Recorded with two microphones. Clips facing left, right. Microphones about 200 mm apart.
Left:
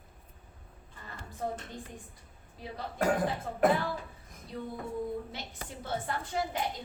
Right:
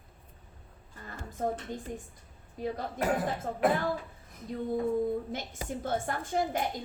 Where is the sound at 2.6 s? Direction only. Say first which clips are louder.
Right 10 dB; 50° right (ahead or behind).